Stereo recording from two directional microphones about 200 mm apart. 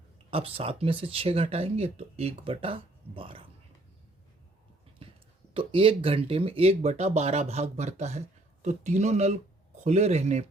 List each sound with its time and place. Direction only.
0.3 s speech: 30° right (ahead or behind)
5.0 s a sound: 25° right (ahead or behind)
5.5 s speech: 25° right (ahead or behind)